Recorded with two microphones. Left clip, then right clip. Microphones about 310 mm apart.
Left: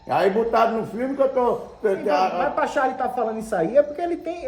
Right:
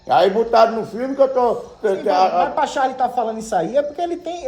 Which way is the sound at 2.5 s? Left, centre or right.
Right.